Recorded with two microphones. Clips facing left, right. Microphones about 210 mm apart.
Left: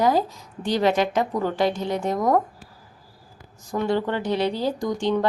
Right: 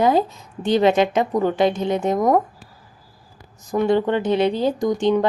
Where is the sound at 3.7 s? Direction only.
20° right (ahead or behind).